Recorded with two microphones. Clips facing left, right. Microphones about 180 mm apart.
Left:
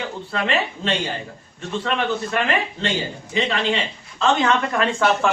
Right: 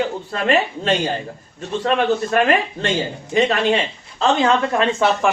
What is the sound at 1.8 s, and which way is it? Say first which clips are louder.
A man's voice: right 5 dB; 45° right (ahead or behind).